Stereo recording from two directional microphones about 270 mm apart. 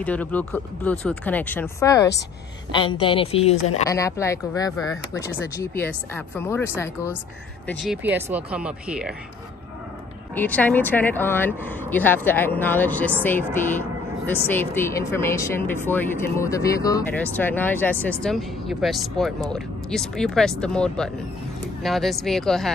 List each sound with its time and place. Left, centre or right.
0.0 s a woman's voice: centre; by 3.5 s left
3.8 s speech: centre
7.6 s speech: centre
10.3 s speech: centre